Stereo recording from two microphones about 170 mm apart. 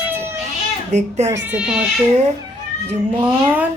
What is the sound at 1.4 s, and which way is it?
Speech, 5° right (ahead or behind).